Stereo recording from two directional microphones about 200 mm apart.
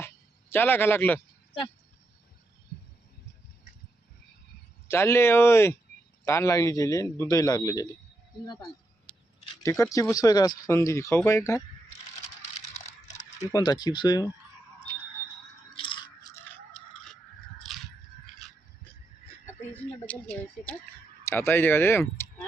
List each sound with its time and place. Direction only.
0.5 s speech: 10° left (ahead or behind)
4.9 s speech: 15° left (ahead or behind)
13.5 s speech: 20° left (ahead or behind)
15.7 s a sound: 25° left (ahead or behind); by 17.8 s centre (ahead or behind)
20.1 s speech: 5° left (ahead or behind)